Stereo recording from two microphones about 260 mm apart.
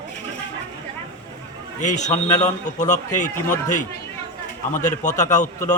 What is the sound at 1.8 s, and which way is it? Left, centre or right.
Speech, left.